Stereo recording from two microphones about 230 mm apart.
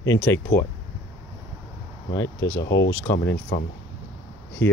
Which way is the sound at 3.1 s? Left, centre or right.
Left.